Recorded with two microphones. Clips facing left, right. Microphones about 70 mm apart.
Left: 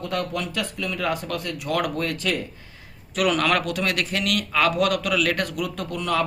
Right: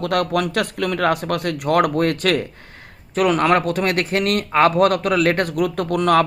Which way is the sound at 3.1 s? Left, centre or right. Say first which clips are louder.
Right 5 dB; right.